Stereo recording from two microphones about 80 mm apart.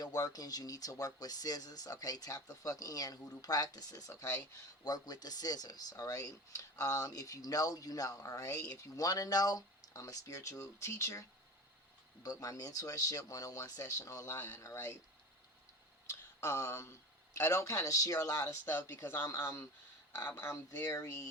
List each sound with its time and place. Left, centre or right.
0.0 s speech: left
12.2 s speech: left
14.3 s speech: left
16.4 s speech: left
18.6 s speech: left